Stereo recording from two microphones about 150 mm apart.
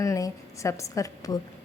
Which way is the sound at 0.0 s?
20° left (ahead or behind).